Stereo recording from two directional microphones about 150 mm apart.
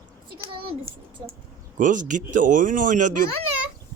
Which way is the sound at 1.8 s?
60° right (ahead or behind).